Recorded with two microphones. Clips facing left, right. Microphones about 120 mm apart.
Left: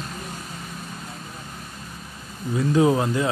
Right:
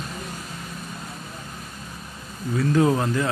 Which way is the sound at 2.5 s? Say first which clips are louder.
Left 1 dB; 15° left (ahead or behind).